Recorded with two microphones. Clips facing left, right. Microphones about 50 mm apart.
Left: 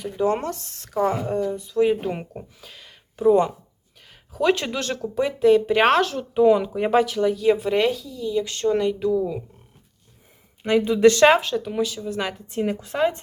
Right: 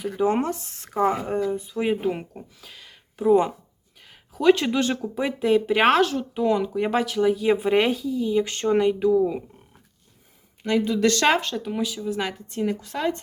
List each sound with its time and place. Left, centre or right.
0.0 s speech: centre
2.0 s speech: centre
10.6 s speech: left
11.3 s speech: centre
12.5 s speech: centre